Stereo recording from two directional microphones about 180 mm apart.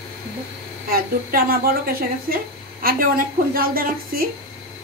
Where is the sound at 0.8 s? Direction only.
55° right (ahead or behind).